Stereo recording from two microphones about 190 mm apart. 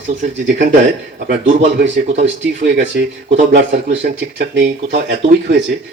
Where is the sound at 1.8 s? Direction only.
55° right (ahead or behind).